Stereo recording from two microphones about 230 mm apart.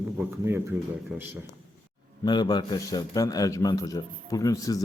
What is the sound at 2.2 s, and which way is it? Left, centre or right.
A man's voice, centre.